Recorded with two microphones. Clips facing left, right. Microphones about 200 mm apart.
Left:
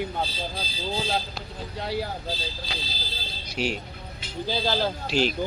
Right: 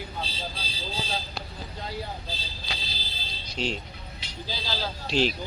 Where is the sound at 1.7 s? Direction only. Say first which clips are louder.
Left 7 dB; 70° left (ahead or behind).